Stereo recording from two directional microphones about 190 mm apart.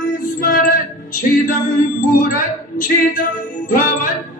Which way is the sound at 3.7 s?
45° left (ahead or behind).